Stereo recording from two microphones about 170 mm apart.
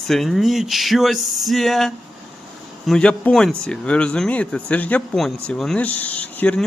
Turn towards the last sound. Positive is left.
turn(degrees=5)  # may be behind; listen again after turning